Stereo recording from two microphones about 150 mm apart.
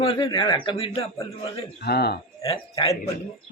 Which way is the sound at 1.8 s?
90° left.